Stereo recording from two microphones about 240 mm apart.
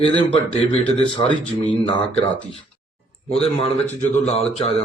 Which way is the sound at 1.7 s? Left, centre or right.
Left.